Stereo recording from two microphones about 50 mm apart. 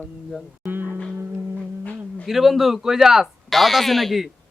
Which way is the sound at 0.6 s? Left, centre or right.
Right.